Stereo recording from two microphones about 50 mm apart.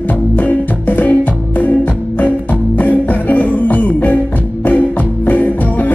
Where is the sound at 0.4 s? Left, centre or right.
Left.